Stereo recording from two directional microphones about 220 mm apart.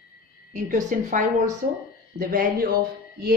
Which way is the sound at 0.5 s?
35° right (ahead or behind).